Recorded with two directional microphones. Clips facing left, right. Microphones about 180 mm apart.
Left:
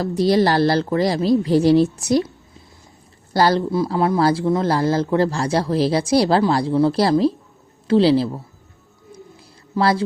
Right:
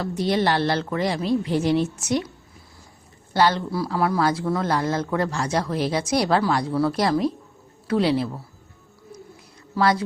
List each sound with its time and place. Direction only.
0.0 s speech: 35° left (ahead or behind)
3.3 s speech: 35° left (ahead or behind)
3.9 s a man's voice: 20° left (ahead or behind)
4.2 s a man's voice: 35° left (ahead or behind)
9.7 s a man's voice: 30° left (ahead or behind)